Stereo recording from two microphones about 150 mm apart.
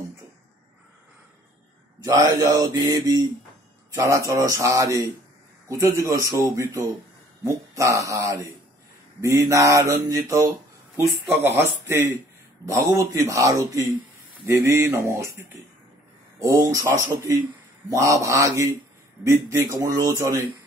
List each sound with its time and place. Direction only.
2.0 s mantra: 25° right (ahead or behind)
11.1 s speech: 15° right (ahead or behind)
12.6 s mantra: 20° right (ahead or behind)